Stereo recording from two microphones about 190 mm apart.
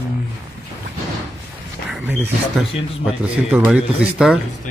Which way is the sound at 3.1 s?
5° right (ahead or behind).